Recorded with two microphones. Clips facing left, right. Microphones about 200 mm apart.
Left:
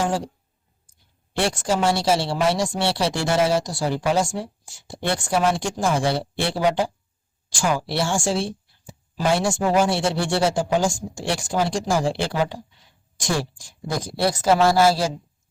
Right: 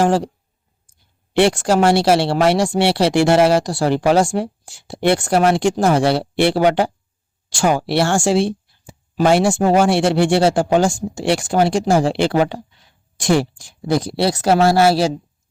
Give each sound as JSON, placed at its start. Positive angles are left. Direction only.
{"t": 0.0, "sound": "speech", "side_deg": -70}
{"t": 1.3, "sound": "speech", "side_deg": -70}